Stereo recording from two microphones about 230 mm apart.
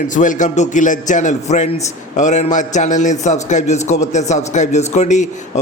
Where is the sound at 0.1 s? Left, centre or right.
Left.